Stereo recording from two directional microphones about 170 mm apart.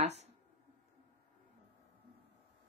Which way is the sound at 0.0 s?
40° right (ahead or behind).